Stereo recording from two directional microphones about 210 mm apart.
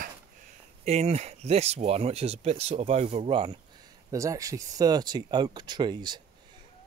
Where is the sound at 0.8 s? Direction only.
30° right (ahead or behind).